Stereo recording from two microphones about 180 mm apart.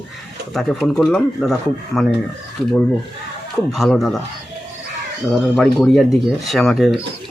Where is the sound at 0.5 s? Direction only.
Centre (ahead or behind).